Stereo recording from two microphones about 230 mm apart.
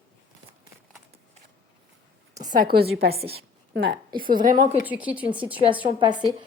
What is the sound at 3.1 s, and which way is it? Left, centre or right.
Speech, right.